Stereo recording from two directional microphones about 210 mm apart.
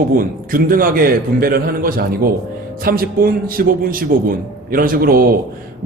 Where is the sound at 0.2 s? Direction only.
40° right (ahead or behind).